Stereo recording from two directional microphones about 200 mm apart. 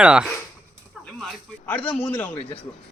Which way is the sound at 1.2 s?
5° left (ahead or behind).